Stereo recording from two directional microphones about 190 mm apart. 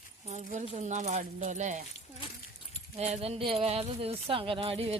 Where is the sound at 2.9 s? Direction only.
30° right (ahead or behind).